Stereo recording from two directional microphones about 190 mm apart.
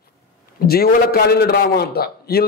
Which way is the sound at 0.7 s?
55° left (ahead or behind).